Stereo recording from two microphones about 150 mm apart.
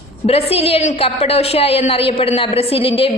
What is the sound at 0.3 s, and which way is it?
A woman's voice, 40° left (ahead or behind).